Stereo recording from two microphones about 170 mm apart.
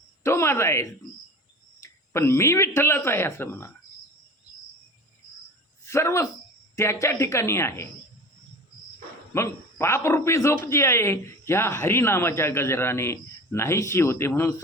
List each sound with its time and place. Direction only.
0.2 s speech: 15° left (ahead or behind)
5.8 s speech: 15° left (ahead or behind)
9.3 s speech: 15° left (ahead or behind)